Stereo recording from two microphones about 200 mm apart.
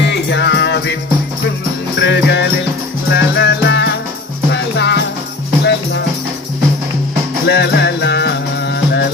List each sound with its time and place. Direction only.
0.1 s music: 60° left (ahead or behind)
2.0 s music: 65° left (ahead or behind)
7.4 s music: 60° left (ahead or behind)